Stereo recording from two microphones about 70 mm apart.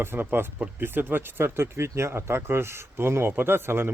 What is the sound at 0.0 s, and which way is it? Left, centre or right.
Speech, right.